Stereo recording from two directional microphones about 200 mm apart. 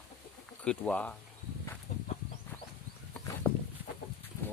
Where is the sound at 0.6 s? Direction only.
5° left (ahead or behind).